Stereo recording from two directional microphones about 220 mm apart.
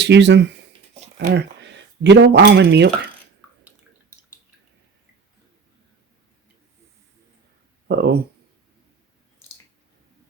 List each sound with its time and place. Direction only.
0.0 s speech: 50° right (ahead or behind)
0.7 s a sound: 30° right (ahead or behind)
1.2 s speech: 50° right (ahead or behind)
7.9 s speech: 45° right (ahead or behind)